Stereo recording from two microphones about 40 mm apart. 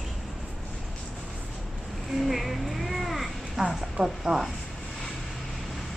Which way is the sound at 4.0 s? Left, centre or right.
Right.